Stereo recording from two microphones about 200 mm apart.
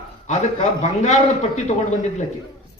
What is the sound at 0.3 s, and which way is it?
A man's voice, 35° left (ahead or behind).